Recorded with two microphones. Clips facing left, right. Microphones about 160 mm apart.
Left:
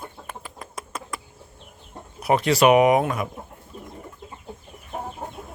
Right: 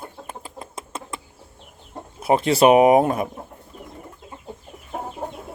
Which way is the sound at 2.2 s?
25° right (ahead or behind).